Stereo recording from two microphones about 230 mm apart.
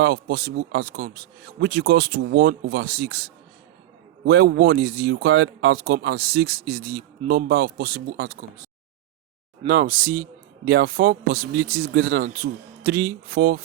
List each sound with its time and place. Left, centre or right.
0.0 s speech: right
9.6 s a man's voice: right